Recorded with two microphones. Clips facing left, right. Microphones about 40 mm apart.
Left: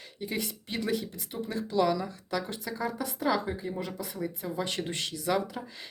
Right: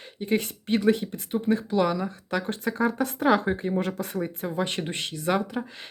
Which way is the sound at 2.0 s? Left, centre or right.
Right.